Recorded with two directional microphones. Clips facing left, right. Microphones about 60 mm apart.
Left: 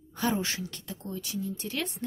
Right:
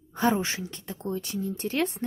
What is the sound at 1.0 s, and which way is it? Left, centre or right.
Speech, right.